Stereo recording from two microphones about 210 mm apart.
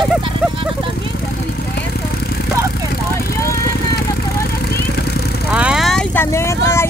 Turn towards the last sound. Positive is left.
turn(degrees=10)  # may be behind; listen again after turning